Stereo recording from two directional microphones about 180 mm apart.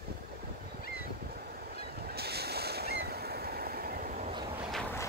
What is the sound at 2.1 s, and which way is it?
Waves, 60° right (ahead or behind).